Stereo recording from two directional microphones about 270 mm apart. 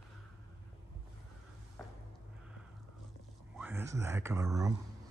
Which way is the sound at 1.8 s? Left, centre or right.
Centre.